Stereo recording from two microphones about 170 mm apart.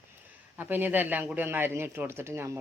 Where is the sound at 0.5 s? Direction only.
10° right (ahead or behind).